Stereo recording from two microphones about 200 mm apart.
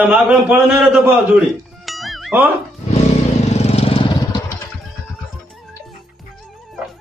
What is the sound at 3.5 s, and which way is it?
Vehicle, 30° left (ahead or behind).